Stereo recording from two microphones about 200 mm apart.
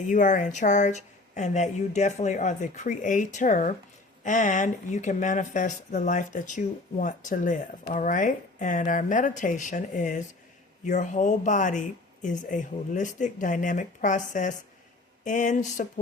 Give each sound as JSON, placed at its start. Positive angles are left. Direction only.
{"t": 0.0, "sound": "speech", "side_deg": 40}